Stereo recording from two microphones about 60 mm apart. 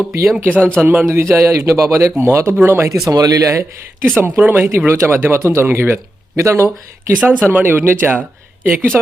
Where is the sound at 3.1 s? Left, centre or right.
Right.